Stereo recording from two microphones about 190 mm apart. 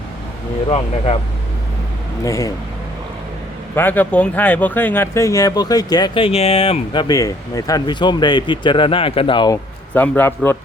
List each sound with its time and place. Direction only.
0.7 s speech: 30° left (ahead or behind)
2.2 s a man's voice: 15° left (ahead or behind)
3.8 s speech: 10° left (ahead or behind); by 9.6 s 25° left (ahead or behind)
9.9 s a man's voice: 10° left (ahead or behind)